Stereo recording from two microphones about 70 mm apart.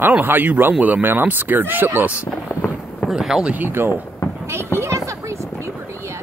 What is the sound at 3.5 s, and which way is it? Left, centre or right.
Speech, right.